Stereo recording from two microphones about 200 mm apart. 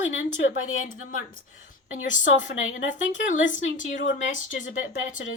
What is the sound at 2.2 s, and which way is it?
Speech, 40° left (ahead or behind).